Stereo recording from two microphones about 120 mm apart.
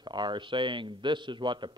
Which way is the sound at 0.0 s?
40° right (ahead or behind).